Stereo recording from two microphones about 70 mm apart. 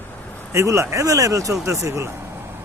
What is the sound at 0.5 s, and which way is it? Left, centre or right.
Speech, right.